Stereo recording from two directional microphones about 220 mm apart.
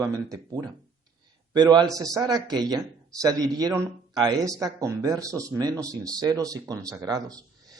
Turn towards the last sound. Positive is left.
turn(degrees=-15)  # may be behind; listen again after turning